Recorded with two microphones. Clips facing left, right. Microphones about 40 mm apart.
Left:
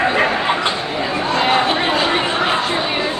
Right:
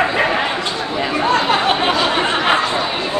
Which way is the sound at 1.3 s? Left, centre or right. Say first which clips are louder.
Even; right.